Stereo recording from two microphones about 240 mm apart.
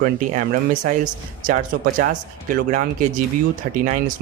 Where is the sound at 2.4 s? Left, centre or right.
Right.